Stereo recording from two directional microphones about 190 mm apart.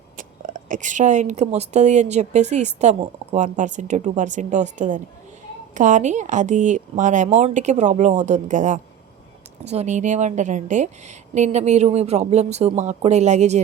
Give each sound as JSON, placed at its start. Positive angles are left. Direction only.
{"t": 0.2, "sound": "a woman's voice", "side_deg": -45}